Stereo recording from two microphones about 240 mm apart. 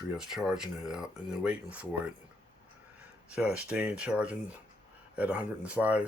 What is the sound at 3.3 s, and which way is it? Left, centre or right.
Speech, centre.